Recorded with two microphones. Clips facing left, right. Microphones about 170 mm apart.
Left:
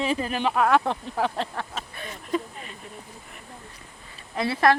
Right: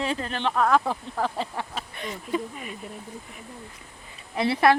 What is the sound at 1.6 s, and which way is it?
Speech, 15° right (ahead or behind).